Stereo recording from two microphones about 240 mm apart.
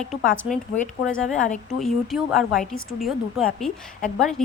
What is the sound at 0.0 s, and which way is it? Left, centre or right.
A woman's voice, centre.